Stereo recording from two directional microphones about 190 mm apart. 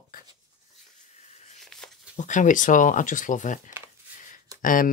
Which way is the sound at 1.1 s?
35° left (ahead or behind).